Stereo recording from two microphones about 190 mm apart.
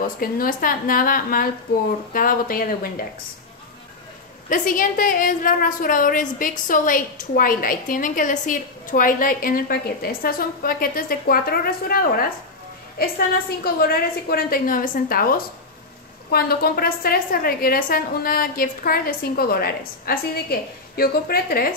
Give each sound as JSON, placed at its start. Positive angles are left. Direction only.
{"t": 0.2, "sound": "a woman's voice", "side_deg": 50}
{"t": 4.5, "sound": "a woman's voice", "side_deg": 45}